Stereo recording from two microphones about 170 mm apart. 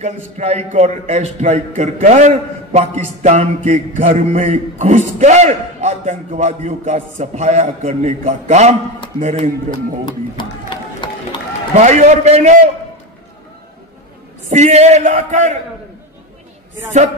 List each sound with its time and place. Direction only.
0.0 s a man's voice: 40° right (ahead or behind)
10.4 s a sound: 30° left (ahead or behind)
11.7 s a man's voice: 40° right (ahead or behind)
14.5 s speech: 40° right (ahead or behind)